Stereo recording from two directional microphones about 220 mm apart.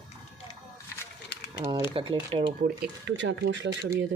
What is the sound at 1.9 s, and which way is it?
Speech, 25° right (ahead or behind).